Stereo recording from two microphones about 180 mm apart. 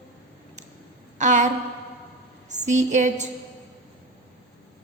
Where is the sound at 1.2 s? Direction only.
40° right (ahead or behind).